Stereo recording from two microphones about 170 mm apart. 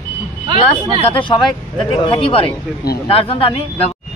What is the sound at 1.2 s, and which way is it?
Speech, 30° left (ahead or behind).